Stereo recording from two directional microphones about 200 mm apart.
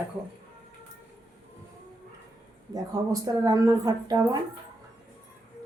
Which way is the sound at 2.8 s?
20° right (ahead or behind).